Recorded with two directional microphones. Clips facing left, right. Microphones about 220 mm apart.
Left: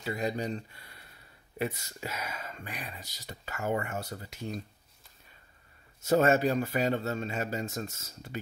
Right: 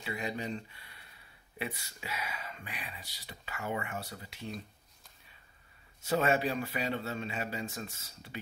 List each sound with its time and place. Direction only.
0.0 s speech: 40° left (ahead or behind)
5.9 s speech: 45° left (ahead or behind)